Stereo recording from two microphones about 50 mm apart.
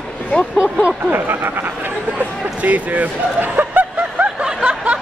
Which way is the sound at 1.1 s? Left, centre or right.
Right.